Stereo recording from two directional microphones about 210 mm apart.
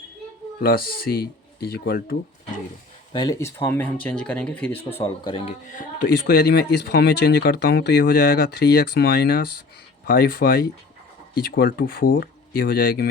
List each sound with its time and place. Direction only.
0.6 s speech: 45° left (ahead or behind)
3.1 s speech: 20° left (ahead or behind)
5.6 s speech: 40° left (ahead or behind)